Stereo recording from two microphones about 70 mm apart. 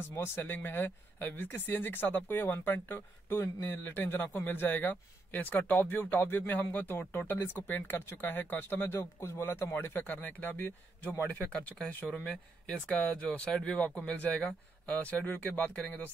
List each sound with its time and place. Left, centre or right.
0.1 s speech: left